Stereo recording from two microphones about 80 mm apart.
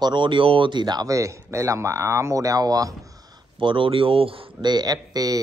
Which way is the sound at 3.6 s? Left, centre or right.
Right.